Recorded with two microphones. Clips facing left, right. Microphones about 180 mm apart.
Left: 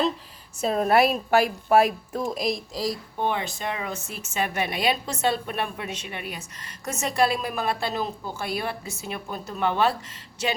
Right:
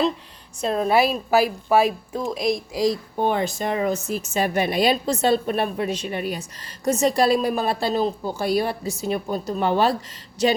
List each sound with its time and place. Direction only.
0.6 s a woman's voice: 5° left (ahead or behind)
2.7 s speech: 20° right (ahead or behind)
3.2 s a woman's voice: 40° right (ahead or behind)